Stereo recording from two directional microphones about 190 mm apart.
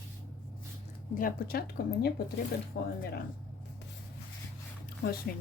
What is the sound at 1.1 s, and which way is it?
A woman's voice, 50° left (ahead or behind).